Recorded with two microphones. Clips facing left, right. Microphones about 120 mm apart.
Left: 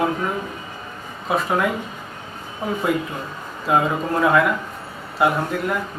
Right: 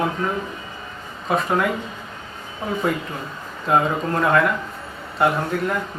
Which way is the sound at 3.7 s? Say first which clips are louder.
Even; 5° left (ahead or behind).